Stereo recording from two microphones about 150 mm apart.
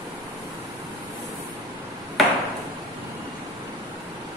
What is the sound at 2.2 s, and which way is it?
Ping, centre (ahead or behind).